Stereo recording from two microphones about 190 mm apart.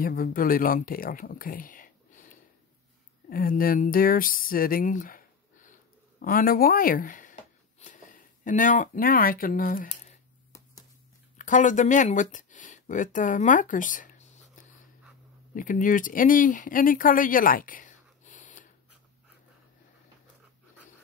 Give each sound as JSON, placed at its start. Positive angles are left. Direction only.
{"t": 0.0, "sound": "speech", "side_deg": 50}
{"t": 11.3, "sound": "speech", "side_deg": 40}